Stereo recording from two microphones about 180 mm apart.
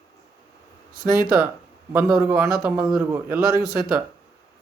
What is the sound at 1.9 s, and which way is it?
A man's voice, 5° right (ahead or behind).